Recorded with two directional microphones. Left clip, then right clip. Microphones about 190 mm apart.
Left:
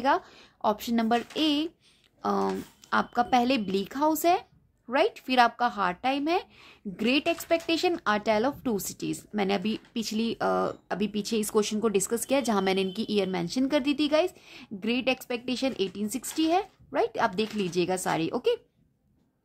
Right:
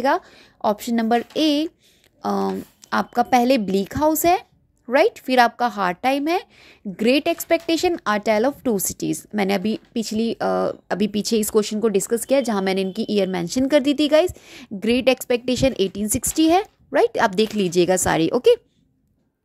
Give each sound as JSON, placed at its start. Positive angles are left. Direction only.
{"t": 0.0, "sound": "a woman's voice", "side_deg": -25}